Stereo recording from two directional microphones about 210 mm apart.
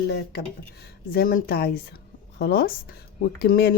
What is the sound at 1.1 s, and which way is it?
Speech, 45° left (ahead or behind).